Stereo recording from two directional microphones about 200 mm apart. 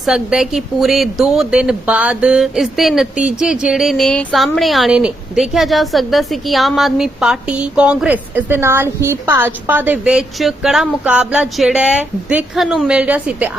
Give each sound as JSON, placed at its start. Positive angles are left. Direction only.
{"t": 0.0, "sound": "speech", "side_deg": 0}